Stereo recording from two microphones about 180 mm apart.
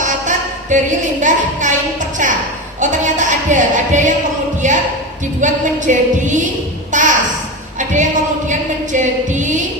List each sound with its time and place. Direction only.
0.0 s speech: 45° right (ahead or behind)
6.9 s a sound: 45° right (ahead or behind)
7.8 s a woman's voice: 45° right (ahead or behind)